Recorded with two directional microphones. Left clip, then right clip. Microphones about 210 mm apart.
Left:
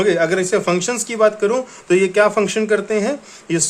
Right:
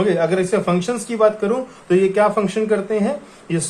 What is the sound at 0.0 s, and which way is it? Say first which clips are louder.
Speech: left 1 dB; 35° left (ahead or behind).